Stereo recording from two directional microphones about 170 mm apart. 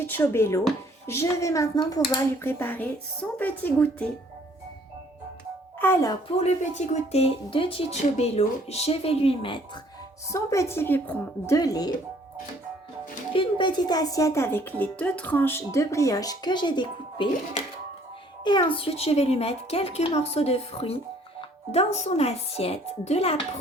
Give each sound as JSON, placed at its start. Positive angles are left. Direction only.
{"t": 0.0, "sound": "a woman's voice", "side_deg": 15}
{"t": 5.8, "sound": "a woman's voice", "side_deg": 15}
{"t": 6.2, "sound": "speech", "side_deg": 40}
{"t": 10.2, "sound": "a woman's voice", "side_deg": 15}
{"t": 11.5, "sound": "speech", "side_deg": 20}
{"t": 13.3, "sound": "a woman's voice", "side_deg": 30}
{"t": 18.4, "sound": "speech", "side_deg": 30}